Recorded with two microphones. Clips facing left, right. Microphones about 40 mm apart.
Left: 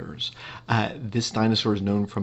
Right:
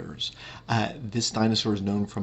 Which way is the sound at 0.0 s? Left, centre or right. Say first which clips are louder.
Left 2 dB; centre.